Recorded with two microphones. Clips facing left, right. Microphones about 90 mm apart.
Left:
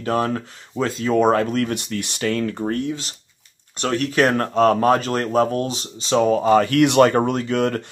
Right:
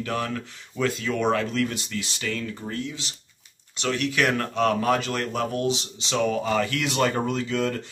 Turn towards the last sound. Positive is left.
turn(degrees=60)  # may be behind; listen again after turning